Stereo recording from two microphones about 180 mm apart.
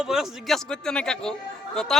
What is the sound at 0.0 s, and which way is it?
A man's voice, centre (ahead or behind).